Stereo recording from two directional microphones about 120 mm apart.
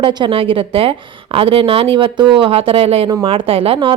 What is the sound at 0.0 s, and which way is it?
Speech, 40° right (ahead or behind).